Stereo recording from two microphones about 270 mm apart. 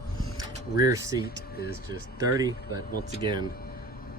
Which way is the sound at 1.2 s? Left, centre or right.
Left.